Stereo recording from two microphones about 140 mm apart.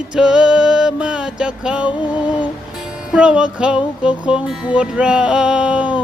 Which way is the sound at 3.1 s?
5° right (ahead or behind).